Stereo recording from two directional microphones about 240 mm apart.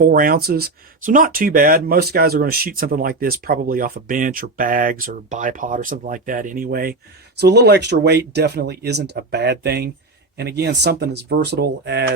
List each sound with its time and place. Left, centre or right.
0.0 s speech: right